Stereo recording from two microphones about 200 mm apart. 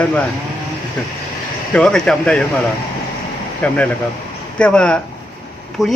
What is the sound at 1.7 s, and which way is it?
Speech, 5° left (ahead or behind).